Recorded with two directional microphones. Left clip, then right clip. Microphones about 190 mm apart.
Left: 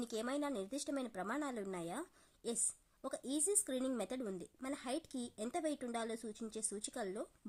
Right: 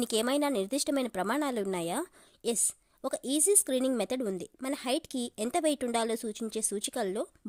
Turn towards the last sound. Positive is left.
turn(degrees=-45)  # may be behind; listen again after turning